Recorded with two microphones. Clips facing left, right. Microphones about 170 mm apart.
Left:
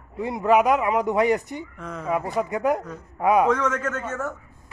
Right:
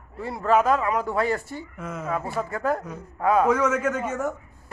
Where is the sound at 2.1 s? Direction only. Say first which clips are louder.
Left 4 dB; 15° left (ahead or behind).